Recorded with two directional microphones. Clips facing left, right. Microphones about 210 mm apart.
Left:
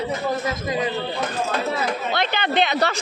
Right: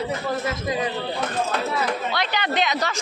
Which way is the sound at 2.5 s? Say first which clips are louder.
Left 5 dB; 60° left (ahead or behind).